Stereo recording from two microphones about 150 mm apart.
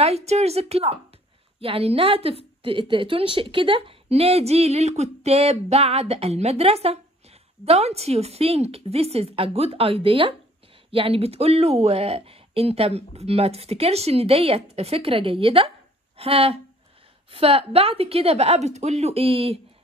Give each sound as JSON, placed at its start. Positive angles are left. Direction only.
{"t": 0.0, "sound": "a woman's voice", "side_deg": -45}